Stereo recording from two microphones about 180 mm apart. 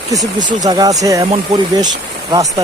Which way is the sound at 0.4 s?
20° right (ahead or behind).